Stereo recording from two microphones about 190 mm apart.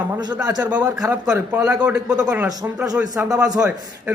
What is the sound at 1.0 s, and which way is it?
A man's voice, 5° right (ahead or behind).